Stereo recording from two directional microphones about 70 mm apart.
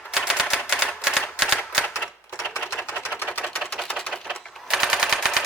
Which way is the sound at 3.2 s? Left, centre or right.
Left.